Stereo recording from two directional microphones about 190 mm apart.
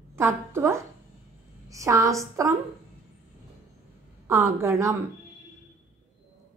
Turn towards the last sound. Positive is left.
turn(degrees=-15)  # may be behind; listen again after turning